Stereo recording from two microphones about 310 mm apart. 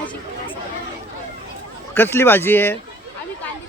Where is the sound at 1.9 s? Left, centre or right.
Centre.